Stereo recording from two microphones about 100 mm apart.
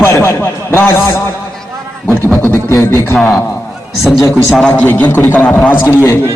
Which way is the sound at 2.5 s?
25° left (ahead or behind).